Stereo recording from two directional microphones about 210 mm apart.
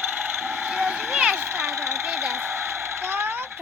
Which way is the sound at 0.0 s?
10° right (ahead or behind).